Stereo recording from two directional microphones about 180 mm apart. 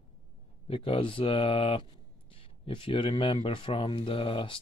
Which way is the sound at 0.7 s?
30° left (ahead or behind).